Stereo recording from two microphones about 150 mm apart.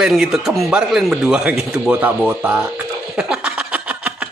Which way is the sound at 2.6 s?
10° right (ahead or behind).